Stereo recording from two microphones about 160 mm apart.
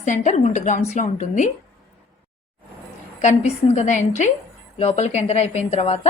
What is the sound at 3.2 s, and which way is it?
A woman's voice, 45° left (ahead or behind).